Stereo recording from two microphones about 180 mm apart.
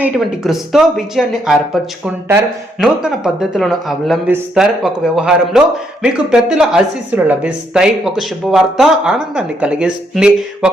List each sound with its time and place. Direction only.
0.0 s a man's voice: centre (ahead or behind)
3.5 s a man's voice: centre (ahead or behind)